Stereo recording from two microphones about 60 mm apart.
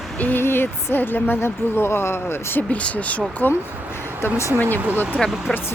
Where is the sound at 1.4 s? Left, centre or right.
Left.